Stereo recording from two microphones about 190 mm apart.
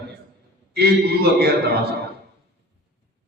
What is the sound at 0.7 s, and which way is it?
A man's voice, 55° right (ahead or behind).